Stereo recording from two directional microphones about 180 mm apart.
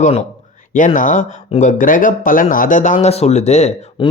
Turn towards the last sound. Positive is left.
turn(degrees=25)  # may be behind; listen again after turning